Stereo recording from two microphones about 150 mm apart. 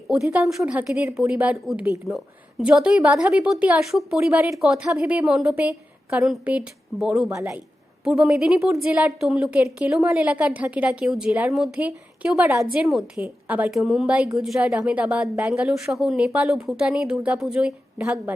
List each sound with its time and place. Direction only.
0.1 s a woman's voice: 5° right (ahead or behind)
2.1 s a woman's voice: centre (ahead or behind)
7.3 s speech: 20° right (ahead or behind)
8.0 s a woman's voice: 5° right (ahead or behind)